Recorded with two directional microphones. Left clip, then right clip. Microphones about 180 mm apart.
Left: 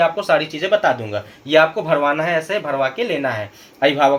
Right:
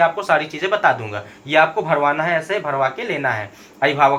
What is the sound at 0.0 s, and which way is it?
Speech, 45° left (ahead or behind).